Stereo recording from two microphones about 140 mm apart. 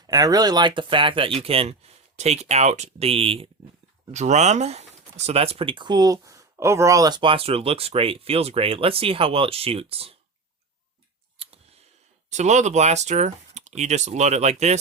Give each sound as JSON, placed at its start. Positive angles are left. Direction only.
{"t": 0.1, "sound": "speech", "side_deg": -25}
{"t": 4.1, "sound": "speech", "side_deg": -55}
{"t": 11.3, "sound": "a sound", "side_deg": -45}
{"t": 12.3, "sound": "speech", "side_deg": -55}